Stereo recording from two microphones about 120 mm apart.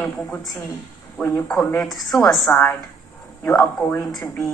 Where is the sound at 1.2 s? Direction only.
15° left (ahead or behind).